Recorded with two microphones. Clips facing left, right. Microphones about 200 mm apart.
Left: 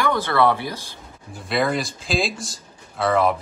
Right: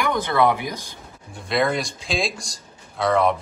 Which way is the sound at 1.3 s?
Centre (ahead or behind).